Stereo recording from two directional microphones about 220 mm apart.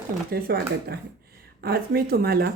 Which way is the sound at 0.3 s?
45° right (ahead or behind).